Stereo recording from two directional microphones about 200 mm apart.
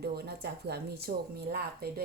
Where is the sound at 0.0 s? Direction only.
55° right (ahead or behind).